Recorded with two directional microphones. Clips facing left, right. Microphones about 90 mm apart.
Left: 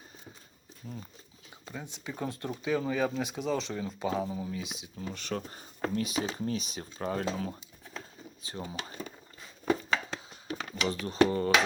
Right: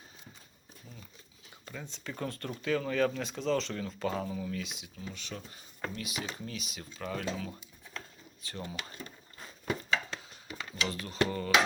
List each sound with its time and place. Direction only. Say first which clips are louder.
1.6 s speech: left 2 dB; 15° left (ahead or behind)
4.3 s speech: left 1 dB; 25° left (ahead or behind)
4.9 s speech: left 7 dB; 45° left (ahead or behind)
7.9 s a sound: left 2 dB; 15° left (ahead or behind)
10.5 s a sound: left 6 dB; 65° left (ahead or behind)
10.8 s speech: left 6 dB; 25° left (ahead or behind)